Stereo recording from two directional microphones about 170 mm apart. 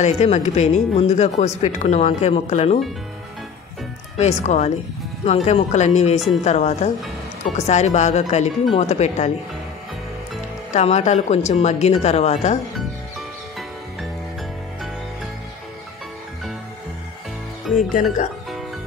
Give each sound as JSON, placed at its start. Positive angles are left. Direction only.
{"t": 0.0, "sound": "speech", "side_deg": 40}
{"t": 4.2, "sound": "speech", "side_deg": 40}
{"t": 10.7, "sound": "speech", "side_deg": 40}